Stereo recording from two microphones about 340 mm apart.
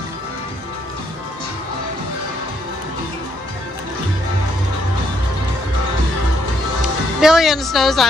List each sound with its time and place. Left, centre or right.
7.2 s speech: centre